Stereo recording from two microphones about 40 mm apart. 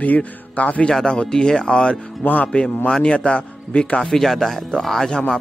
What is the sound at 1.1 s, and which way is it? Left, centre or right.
Speech, centre.